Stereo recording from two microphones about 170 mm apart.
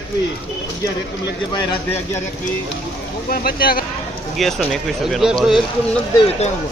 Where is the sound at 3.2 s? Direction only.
60° left (ahead or behind).